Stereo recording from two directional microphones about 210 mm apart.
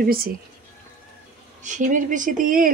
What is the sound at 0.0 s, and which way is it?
Speech, 45° right (ahead or behind).